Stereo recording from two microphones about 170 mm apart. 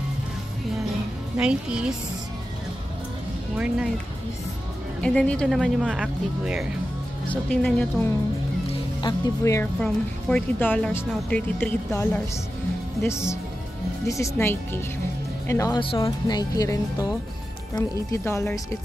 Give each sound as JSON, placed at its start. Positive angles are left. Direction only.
{"t": 1.3, "sound": "speech", "side_deg": -5}
{"t": 3.5, "sound": "speech", "side_deg": -5}
{"t": 5.0, "sound": "speech", "side_deg": 5}
{"t": 7.2, "sound": "speech", "side_deg": 5}
{"t": 9.8, "sound": "speech", "side_deg": 5}
{"t": 14.0, "sound": "speech", "side_deg": 20}